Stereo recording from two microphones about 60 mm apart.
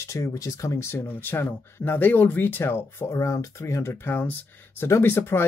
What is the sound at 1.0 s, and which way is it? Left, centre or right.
Speech, left.